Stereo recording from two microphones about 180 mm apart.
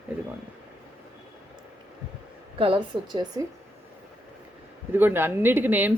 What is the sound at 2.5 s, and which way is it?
Speech, 30° right (ahead or behind).